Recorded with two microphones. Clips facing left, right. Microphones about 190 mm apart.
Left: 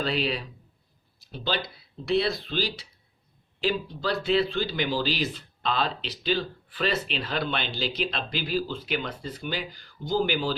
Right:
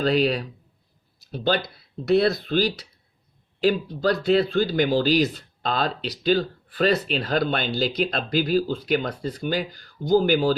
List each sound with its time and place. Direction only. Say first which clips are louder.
0.0 s speech: right 7 dB; 45° right (ahead or behind)